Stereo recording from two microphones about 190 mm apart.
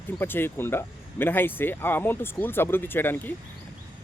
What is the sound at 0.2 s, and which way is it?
Speech, 10° left (ahead or behind).